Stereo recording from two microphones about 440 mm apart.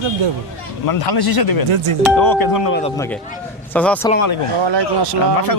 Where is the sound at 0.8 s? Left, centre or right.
Left.